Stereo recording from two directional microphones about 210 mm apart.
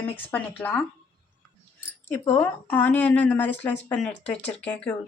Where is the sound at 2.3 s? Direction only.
10° left (ahead or behind).